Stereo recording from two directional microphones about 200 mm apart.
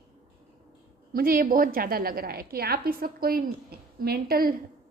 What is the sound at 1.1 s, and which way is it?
A woman's voice, 45° right (ahead or behind).